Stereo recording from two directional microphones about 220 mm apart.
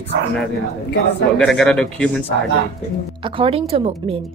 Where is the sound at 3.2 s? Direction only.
25° right (ahead or behind).